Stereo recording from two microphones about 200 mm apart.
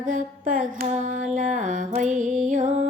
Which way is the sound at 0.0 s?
40° right (ahead or behind).